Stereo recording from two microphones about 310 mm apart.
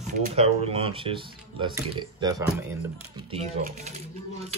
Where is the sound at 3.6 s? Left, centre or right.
Right.